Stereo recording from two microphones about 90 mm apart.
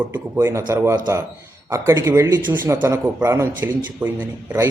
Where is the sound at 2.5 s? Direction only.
20° right (ahead or behind).